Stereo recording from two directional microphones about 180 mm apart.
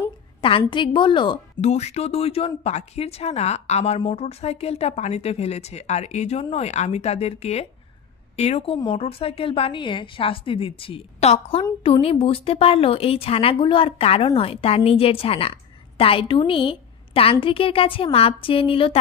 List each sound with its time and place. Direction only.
0.4 s a woman's voice: 30° left (ahead or behind)
1.6 s a woman's voice: 35° left (ahead or behind)